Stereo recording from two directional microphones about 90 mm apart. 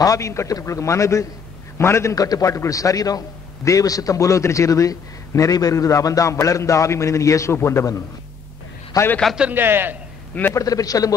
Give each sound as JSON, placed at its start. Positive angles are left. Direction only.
{"t": 0.0, "sound": "a man's voice", "side_deg": 35}
{"t": 9.0, "sound": "a man's voice", "side_deg": 40}
{"t": 9.5, "sound": "a man's voice", "side_deg": -25}
{"t": 10.5, "sound": "a man's voice", "side_deg": 40}